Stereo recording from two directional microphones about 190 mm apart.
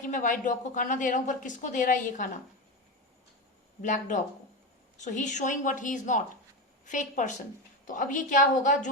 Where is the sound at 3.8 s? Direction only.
40° left (ahead or behind).